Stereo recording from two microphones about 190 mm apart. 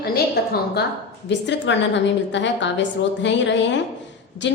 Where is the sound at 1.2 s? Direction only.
70° left (ahead or behind).